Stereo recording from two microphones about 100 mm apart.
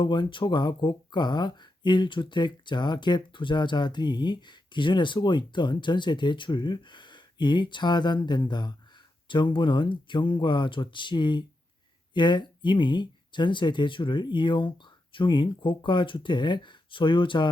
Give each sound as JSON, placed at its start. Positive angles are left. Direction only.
{"t": 0.0, "sound": "speech", "side_deg": 50}